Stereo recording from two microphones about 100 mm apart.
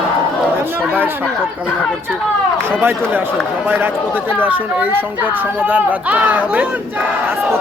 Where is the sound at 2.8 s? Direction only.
20° right (ahead or behind).